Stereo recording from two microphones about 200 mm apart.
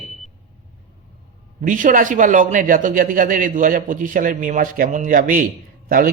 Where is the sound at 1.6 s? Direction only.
40° right (ahead or behind).